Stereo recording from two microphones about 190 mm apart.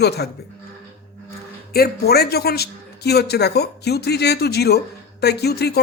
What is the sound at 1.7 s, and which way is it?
A man's voice, 55° left (ahead or behind).